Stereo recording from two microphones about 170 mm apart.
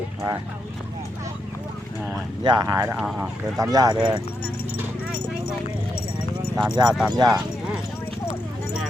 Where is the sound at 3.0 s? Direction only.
5° right (ahead or behind).